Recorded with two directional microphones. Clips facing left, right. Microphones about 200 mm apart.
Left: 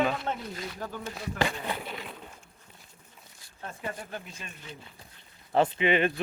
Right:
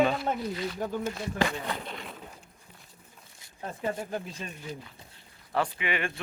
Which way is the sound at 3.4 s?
25° right (ahead or behind).